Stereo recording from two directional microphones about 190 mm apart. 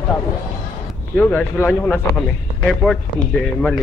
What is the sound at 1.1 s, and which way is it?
Speech, 10° left (ahead or behind).